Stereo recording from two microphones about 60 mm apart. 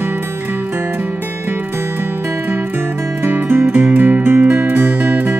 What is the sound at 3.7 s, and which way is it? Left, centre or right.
Music, centre.